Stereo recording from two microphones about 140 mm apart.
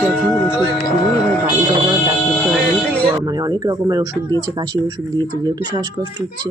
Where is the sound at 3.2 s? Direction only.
30° right (ahead or behind).